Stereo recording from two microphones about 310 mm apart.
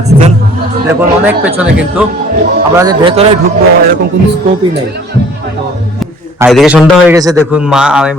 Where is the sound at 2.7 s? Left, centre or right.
Centre.